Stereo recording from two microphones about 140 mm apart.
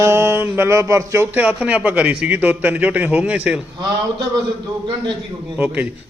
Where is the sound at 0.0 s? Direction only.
20° right (ahead or behind).